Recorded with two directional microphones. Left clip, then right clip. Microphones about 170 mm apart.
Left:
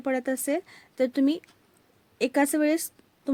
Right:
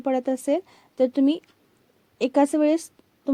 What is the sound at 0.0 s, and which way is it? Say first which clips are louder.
Speech: right 4 dB; centre (ahead or behind).